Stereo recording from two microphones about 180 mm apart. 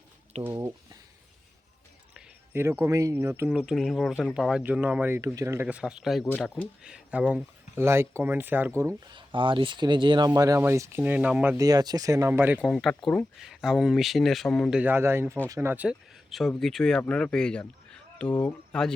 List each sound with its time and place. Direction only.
0.4 s speech: 15° right (ahead or behind)
2.1 s speech: 10° right (ahead or behind)
9.1 s speech: 30° right (ahead or behind); by 11.5 s 5° right (ahead or behind)
11.5 s speech: 20° right (ahead or behind)
12.7 s speech: centre (ahead or behind)
14.8 s speech: 10° right (ahead or behind); by 18.9 s 5° left (ahead or behind)